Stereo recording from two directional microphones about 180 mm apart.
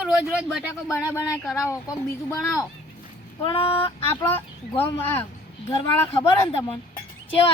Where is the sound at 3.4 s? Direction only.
30° left (ahead or behind).